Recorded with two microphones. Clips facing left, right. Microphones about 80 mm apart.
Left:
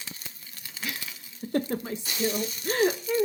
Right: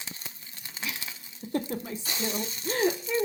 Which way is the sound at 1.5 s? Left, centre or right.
Left.